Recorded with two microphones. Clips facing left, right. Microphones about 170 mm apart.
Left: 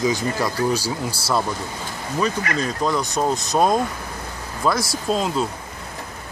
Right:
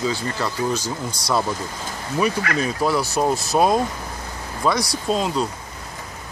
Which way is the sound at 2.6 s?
10° right (ahead or behind).